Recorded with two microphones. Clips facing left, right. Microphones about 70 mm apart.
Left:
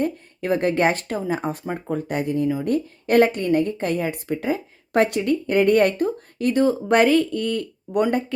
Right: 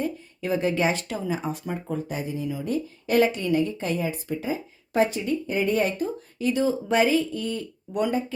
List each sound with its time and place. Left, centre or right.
0.0 s speech: left